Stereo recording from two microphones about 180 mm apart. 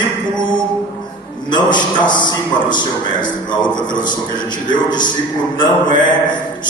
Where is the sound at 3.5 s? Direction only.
25° left (ahead or behind).